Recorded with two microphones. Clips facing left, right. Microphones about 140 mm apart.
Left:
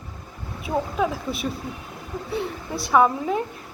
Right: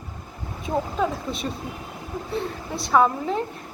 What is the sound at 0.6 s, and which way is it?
A woman's voice, 5° left (ahead or behind).